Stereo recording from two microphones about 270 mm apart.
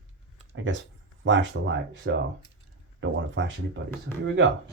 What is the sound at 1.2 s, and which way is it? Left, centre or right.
Speech, right.